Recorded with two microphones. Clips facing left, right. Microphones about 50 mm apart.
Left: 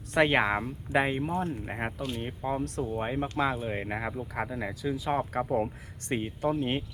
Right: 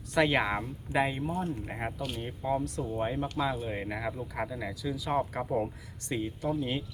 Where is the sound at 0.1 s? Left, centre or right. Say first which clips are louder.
Left 2 dB; left.